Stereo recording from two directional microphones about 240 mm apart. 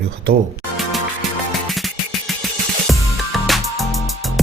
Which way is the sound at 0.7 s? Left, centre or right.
Centre.